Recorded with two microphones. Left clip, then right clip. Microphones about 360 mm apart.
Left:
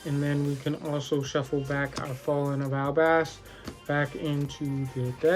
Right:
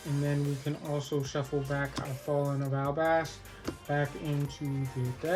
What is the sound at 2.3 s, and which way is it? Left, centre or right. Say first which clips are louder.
Speech: left 3 dB; left.